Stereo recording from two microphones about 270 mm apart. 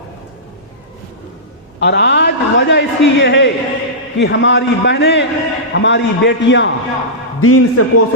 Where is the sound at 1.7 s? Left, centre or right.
Left.